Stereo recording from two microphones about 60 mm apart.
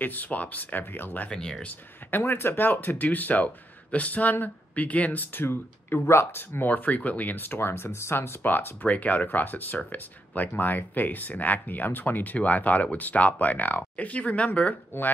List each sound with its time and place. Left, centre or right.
0.0 s speech: left
1.3 s speech: centre
1.7 s speech: left